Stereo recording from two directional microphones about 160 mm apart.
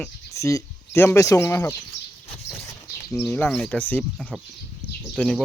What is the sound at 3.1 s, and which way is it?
Speech, 10° left (ahead or behind).